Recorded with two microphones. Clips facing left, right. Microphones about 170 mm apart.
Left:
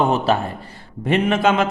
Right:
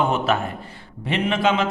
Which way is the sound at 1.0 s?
45° left (ahead or behind).